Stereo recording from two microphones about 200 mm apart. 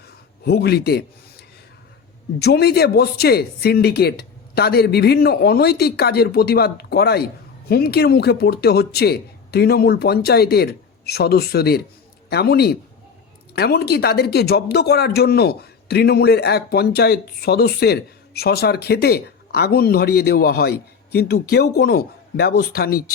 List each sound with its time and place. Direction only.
0.4 s speech: 55° left (ahead or behind)
2.4 s speech: 55° left (ahead or behind)